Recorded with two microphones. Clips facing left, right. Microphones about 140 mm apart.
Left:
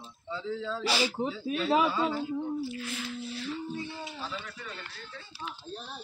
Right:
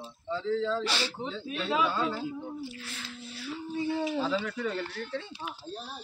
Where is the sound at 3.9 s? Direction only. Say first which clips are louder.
Right 10 dB; 70° right (ahead or behind).